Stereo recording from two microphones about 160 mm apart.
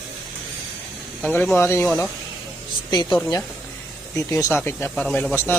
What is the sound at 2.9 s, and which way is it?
Speech, 25° left (ahead or behind).